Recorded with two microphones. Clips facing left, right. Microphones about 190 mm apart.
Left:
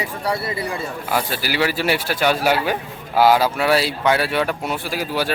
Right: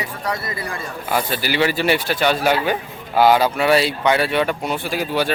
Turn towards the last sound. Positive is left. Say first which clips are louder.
# right 2 dB
turn(degrees=5)  # may be behind; listen again after turning